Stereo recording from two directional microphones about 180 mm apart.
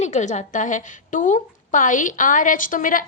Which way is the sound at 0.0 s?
40° left (ahead or behind).